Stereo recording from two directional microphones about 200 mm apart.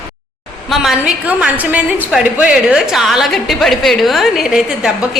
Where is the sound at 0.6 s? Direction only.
Centre (ahead or behind).